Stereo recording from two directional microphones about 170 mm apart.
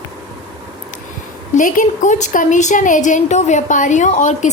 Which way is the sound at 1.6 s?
50° left (ahead or behind).